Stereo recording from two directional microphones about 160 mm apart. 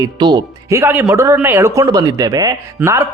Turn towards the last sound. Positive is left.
turn(degrees=-15)  # may be behind; listen again after turning